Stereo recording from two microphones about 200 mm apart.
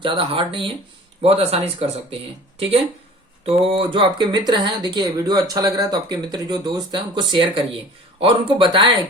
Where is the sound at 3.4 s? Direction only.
25° right (ahead or behind).